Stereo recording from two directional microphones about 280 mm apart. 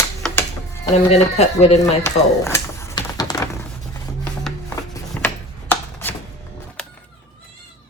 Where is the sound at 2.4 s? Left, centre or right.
Centre.